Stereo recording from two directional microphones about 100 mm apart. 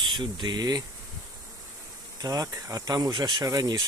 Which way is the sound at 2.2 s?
35° right (ahead or behind).